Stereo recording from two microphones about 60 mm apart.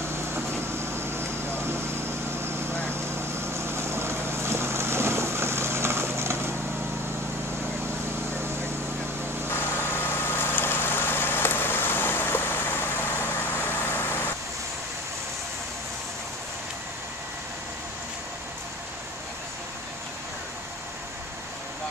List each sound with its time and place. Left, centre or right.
0.1 s air conditioning: right
1.6 s vehicle: right
9.5 s vehicle: left